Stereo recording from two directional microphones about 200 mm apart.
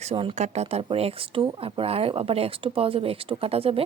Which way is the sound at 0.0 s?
30° right (ahead or behind).